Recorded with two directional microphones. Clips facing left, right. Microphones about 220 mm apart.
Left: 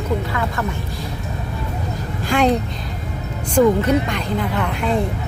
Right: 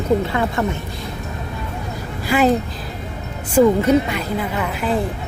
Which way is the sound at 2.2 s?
5° right (ahead or behind).